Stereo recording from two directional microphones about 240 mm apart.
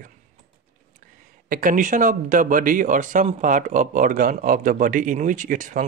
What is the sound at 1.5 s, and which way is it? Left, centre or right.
Speech, right.